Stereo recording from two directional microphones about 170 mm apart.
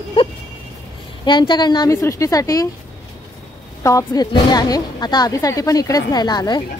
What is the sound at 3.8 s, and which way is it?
A woman's voice, 20° left (ahead or behind).